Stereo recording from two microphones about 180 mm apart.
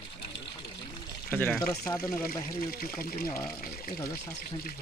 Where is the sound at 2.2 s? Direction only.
55° left (ahead or behind).